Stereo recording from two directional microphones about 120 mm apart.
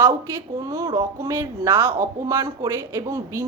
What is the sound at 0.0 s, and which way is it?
Speech, 25° right (ahead or behind).